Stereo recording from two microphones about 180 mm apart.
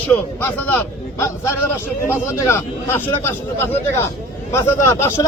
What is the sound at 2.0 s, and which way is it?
Speech, 15° left (ahead or behind).